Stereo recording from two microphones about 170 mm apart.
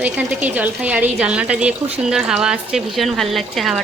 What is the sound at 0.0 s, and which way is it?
Speech, 10° right (ahead or behind).